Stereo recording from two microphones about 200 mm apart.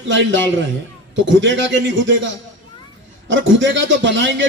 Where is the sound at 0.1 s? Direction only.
70° right (ahead or behind).